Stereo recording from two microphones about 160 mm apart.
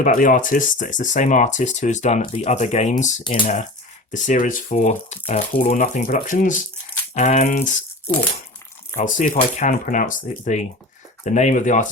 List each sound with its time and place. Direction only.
0.0 s speech: 55° left (ahead or behind)
9.0 s speech: 45° left (ahead or behind)